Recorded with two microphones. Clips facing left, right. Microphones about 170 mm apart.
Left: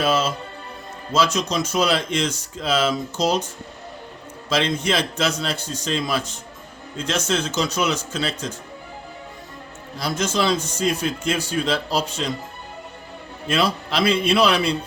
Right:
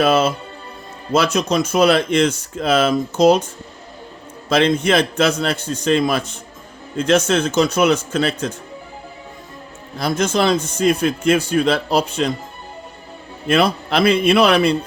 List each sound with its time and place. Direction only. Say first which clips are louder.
0.0 s a man's voice: right 5 dB; 60° right (ahead or behind)
4.4 s a man's voice: right 6 dB; 55° right (ahead or behind)
10.0 s a man's voice: right 5 dB; 55° right (ahead or behind)
13.5 s a man's voice: right 5 dB; 55° right (ahead or behind)